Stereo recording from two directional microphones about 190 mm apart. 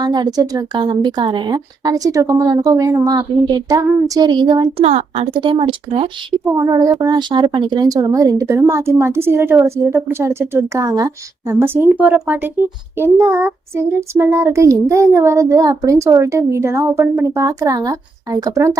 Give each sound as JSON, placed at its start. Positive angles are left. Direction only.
{"t": 0.0, "sound": "a woman's voice", "side_deg": -20}
{"t": 4.9, "sound": "a woman's voice", "side_deg": -35}
{"t": 6.4, "sound": "speech", "side_deg": -20}